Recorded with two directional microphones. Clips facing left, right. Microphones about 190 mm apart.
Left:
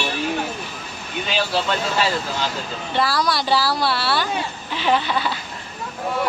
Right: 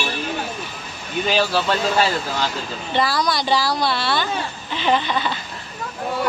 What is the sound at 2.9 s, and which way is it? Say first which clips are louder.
Speech: even; centre (ahead or behind).